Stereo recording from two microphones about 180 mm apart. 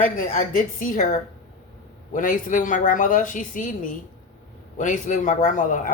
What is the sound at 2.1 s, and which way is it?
Speech, 45° left (ahead or behind).